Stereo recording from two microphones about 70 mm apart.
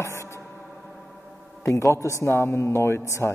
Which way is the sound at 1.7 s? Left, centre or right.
Left.